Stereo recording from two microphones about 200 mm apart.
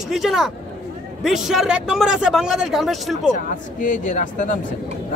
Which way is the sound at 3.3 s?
40° left (ahead or behind).